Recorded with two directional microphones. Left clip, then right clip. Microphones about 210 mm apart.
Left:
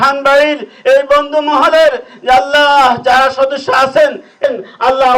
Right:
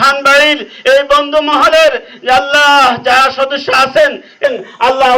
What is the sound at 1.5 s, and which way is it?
A man's voice, 15° left (ahead or behind).